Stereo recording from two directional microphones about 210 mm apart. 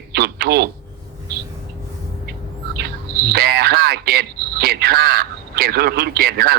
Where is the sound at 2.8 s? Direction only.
50° right (ahead or behind).